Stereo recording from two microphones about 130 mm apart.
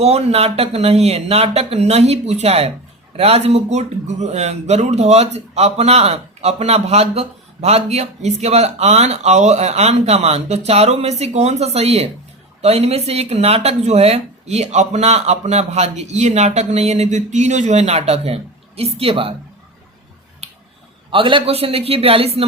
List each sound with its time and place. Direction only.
0.0 s speech: 50° right (ahead or behind)
21.1 s speech: 40° right (ahead or behind)